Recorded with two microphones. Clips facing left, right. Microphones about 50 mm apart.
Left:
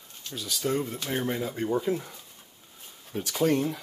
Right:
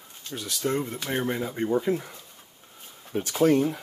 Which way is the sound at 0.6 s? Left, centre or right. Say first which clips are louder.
Right 1 dB; centre.